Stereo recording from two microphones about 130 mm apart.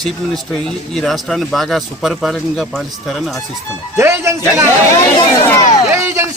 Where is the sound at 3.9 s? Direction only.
20° right (ahead or behind).